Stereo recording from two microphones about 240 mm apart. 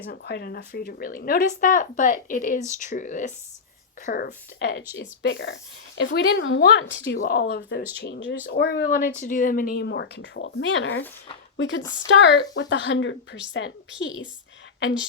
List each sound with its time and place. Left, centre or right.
0.1 s speech: left